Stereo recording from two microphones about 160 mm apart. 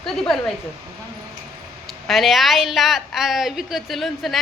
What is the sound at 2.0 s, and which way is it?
A woman's voice, centre (ahead or behind).